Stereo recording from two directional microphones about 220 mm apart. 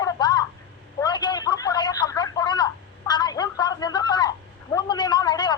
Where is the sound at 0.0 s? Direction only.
20° left (ahead or behind).